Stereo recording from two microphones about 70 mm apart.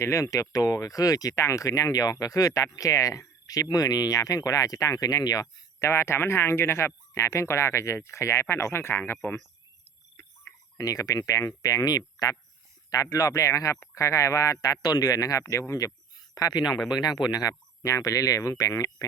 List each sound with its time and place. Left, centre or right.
0.0 s speech: left
5.8 s speech: left
10.2 s cricket: left
10.8 s speech: left
12.9 s speech: left
16.1 s a sound: left
16.9 s speech: left
17.8 s speech: left